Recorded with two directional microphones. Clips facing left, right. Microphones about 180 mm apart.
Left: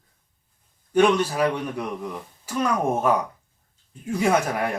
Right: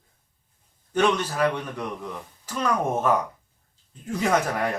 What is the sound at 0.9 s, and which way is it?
Speech, 10° left (ahead or behind).